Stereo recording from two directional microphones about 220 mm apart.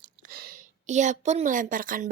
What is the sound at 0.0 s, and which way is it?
A woman's voice, 40° right (ahead or behind).